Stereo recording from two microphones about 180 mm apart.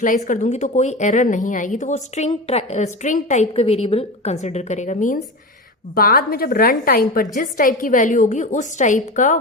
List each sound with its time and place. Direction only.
0.3 s speech: 40° left (ahead or behind)
5.9 s a woman's voice: 55° left (ahead or behind)